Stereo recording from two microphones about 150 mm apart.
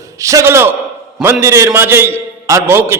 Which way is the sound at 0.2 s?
20° right (ahead or behind).